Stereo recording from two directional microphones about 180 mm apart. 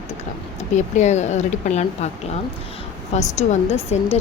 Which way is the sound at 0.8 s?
40° left (ahead or behind).